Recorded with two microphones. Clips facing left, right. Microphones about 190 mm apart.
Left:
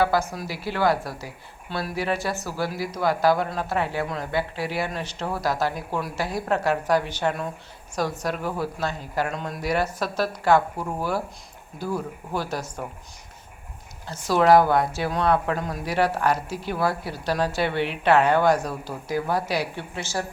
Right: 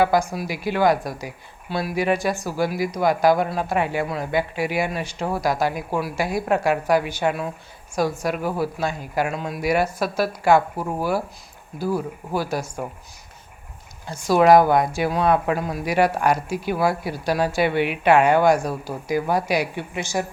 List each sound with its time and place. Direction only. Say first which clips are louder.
0.0 s speech: right 3 dB; 15° right (ahead or behind)
14.1 s speech: right 3 dB; 10° right (ahead or behind)